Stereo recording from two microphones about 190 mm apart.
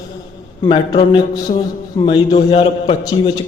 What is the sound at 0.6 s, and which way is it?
A man's voice, 25° left (ahead or behind).